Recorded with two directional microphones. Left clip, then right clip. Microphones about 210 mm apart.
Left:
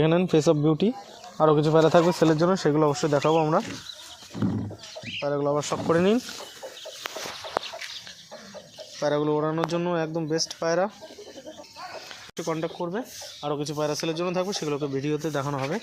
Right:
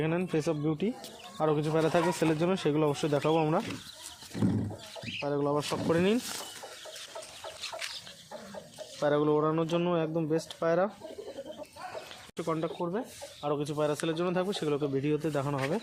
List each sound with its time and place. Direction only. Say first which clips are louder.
0.0 s speech: left 9 dB; 45° left (ahead or behind); by 3.6 s 15° left (ahead or behind)
5.2 s speech: left 5 dB; 30° left (ahead or behind)
9.0 s speech: left 2 dB; 20° left (ahead or behind)
12.4 s speech: left 3 dB; 25° left (ahead or behind)